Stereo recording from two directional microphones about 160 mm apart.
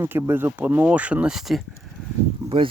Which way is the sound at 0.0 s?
15° right (ahead or behind).